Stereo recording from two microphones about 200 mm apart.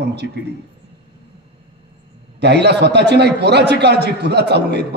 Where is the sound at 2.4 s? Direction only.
55° right (ahead or behind).